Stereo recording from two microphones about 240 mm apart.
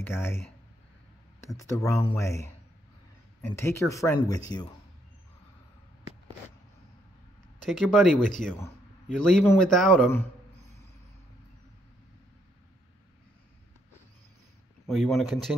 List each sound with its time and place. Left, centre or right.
0.0 s speech: centre
1.7 s speech: centre
3.4 s speech: centre
7.6 s a man's voice: centre
14.9 s a man's voice: centre